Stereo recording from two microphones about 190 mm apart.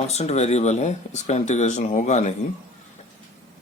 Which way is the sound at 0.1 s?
35° left (ahead or behind).